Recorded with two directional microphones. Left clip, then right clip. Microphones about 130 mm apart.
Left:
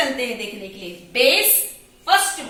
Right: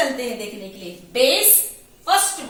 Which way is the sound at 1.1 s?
30° right (ahead or behind).